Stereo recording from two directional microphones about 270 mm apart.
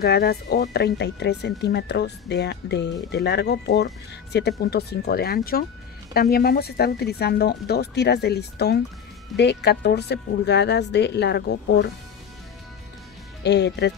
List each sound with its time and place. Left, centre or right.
0.0 s speech: left
13.4 s speech: left